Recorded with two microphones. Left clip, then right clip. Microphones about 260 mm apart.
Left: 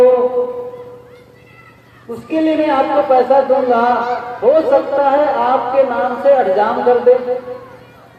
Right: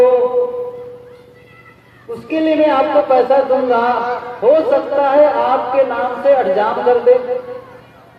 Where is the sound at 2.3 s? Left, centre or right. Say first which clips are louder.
Right 1 dB; right.